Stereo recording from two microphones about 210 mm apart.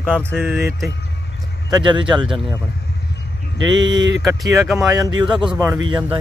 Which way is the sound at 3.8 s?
20° right (ahead or behind).